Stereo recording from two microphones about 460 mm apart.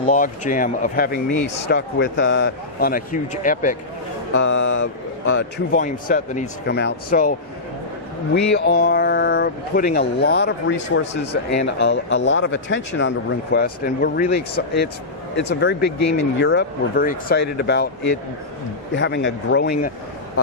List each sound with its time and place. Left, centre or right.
0.0 s speech: centre
1.3 s a man's voice: left
1.7 s speech: left
8.5 s speech: left
18.9 s speech: left